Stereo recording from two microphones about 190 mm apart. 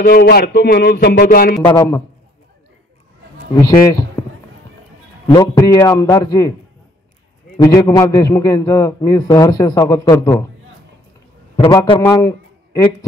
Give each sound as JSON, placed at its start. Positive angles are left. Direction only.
{"t": 0.0, "sound": "speech", "side_deg": 55}
{"t": 1.7, "sound": "a man's voice", "side_deg": 20}
{"t": 3.6, "sound": "a man's voice", "side_deg": 20}
{"t": 5.2, "sound": "a man's voice", "side_deg": 20}
{"t": 7.6, "sound": "a man's voice", "side_deg": 20}
{"t": 11.7, "sound": "a man's voice", "side_deg": 25}